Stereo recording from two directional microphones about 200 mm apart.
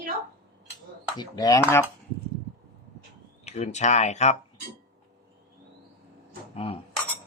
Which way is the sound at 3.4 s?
35° left (ahead or behind).